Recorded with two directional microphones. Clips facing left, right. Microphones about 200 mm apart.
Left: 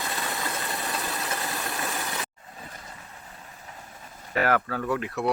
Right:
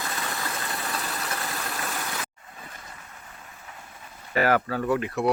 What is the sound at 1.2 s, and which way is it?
Engine, 20° left (ahead or behind).